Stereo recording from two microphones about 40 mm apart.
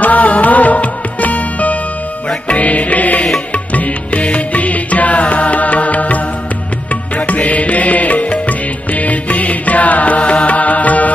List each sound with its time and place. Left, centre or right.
0.0 s music: left